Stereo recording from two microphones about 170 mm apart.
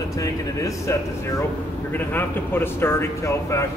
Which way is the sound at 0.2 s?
20° left (ahead or behind).